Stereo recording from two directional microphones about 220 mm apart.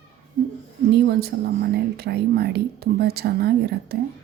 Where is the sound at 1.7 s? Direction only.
45° right (ahead or behind).